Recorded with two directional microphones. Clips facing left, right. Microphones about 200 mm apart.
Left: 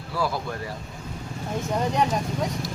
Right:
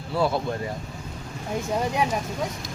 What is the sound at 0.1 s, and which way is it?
Speech, 25° right (ahead or behind).